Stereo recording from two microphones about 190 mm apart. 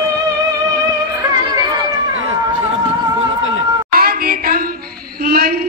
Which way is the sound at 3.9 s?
50° right (ahead or behind).